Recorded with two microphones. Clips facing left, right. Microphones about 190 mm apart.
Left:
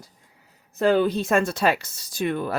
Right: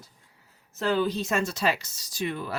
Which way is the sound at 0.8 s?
55° left (ahead or behind).